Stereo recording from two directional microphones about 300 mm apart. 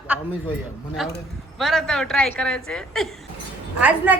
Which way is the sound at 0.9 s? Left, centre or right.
Centre.